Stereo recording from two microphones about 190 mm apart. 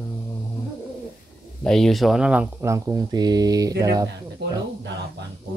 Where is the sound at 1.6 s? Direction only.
Centre (ahead or behind); by 4.1 s 20° right (ahead or behind).